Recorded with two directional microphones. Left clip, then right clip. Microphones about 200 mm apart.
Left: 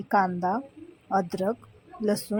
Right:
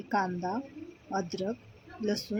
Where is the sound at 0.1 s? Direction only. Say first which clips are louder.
Left 7 dB; 20° left (ahead or behind).